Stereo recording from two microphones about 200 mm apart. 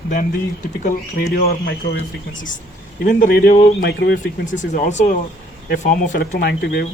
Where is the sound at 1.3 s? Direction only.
50° left (ahead or behind).